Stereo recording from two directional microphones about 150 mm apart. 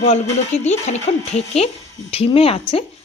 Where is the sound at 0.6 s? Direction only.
50° left (ahead or behind).